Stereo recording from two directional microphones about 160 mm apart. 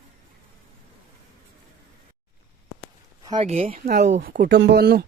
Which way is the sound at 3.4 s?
40° right (ahead or behind).